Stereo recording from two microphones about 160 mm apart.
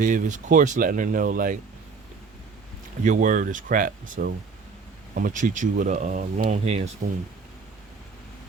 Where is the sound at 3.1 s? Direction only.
55° right (ahead or behind).